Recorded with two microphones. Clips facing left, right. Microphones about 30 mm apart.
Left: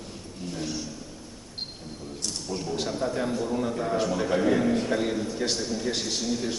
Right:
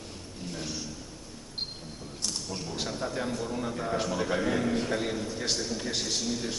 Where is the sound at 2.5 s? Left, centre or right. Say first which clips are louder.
Left 5 dB; centre.